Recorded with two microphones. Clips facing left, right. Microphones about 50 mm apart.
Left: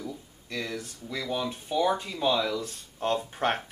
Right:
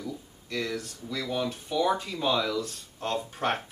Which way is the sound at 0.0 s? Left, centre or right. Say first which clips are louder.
Right 1 dB; centre.